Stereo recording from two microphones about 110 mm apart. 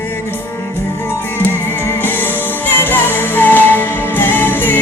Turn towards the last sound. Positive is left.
turn(degrees=20)  # may be behind; listen again after turning